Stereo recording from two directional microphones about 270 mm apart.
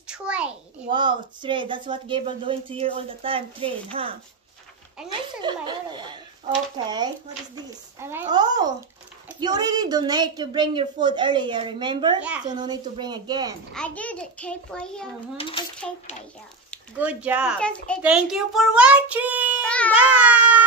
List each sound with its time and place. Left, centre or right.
0.0 s a sound: centre
0.8 s speech: centre
5.1 s a woman's voice: centre
12.2 s a woman's voice: centre
12.4 s a woman's voice: centre
13.7 s a woman's voice: centre
15.4 s speech: left
15.8 s a woman's voice: centre